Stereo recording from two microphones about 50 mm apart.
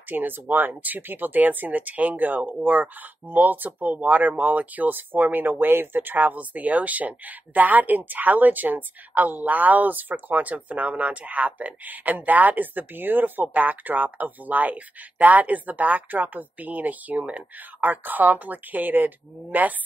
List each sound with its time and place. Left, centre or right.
0.1 s speech: right